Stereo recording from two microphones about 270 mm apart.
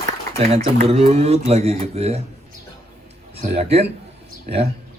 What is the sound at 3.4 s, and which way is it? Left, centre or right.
Speech, right.